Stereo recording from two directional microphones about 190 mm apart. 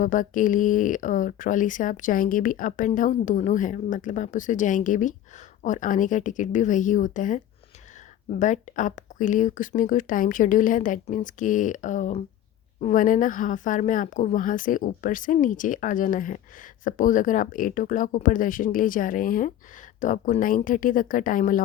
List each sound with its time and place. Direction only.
0.0 s speech: 45° left (ahead or behind)